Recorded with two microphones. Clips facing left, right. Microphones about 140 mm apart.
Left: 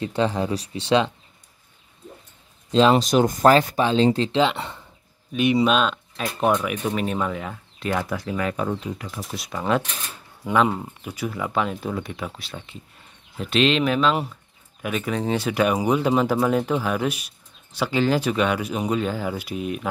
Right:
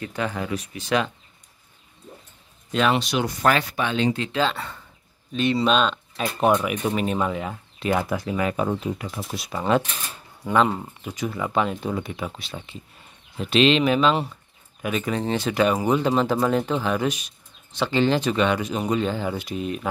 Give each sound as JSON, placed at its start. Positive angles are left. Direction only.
{"t": 0.0, "sound": "speech", "side_deg": 30}
{"t": 2.7, "sound": "speech", "side_deg": 25}
{"t": 3.0, "sound": "speech", "side_deg": 40}
{"t": 4.4, "sound": "speech", "side_deg": 20}
{"t": 5.6, "sound": "speech", "side_deg": 5}